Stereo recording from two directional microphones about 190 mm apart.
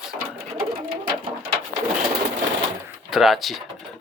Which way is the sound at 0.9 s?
50° right (ahead or behind).